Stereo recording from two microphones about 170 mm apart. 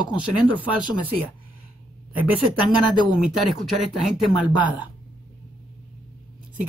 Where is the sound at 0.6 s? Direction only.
10° right (ahead or behind).